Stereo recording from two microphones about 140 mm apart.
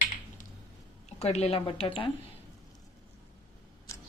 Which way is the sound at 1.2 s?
50° left (ahead or behind).